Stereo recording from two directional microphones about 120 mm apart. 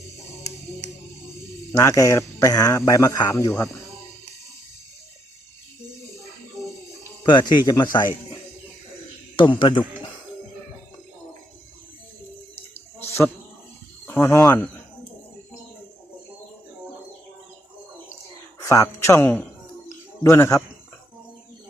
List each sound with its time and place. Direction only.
1.7 s a man's voice: 25° left (ahead or behind)
7.3 s a man's voice: 40° left (ahead or behind)
13.1 s a sound: 20° left (ahead or behind)
14.1 s a man's voice: 25° left (ahead or behind)
18.6 s a man's voice: 25° left (ahead or behind)